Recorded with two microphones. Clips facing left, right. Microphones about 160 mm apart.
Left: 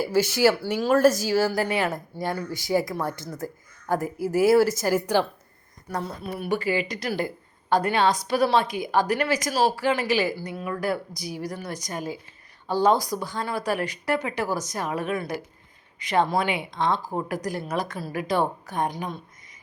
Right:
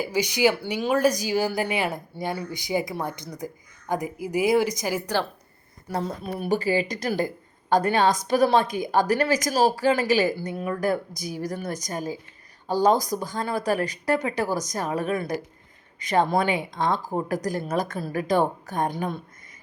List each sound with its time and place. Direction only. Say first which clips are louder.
0.0 s speech: left 2 dB; 15° right (ahead or behind)
5.9 s a woman's voice: right 2 dB; 35° right (ahead or behind); by 19.2 s 55° right (ahead or behind)